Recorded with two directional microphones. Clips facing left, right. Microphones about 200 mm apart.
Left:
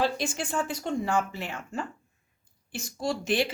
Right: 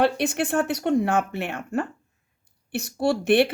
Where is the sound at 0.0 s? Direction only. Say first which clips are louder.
Right 6 dB; 65° right (ahead or behind).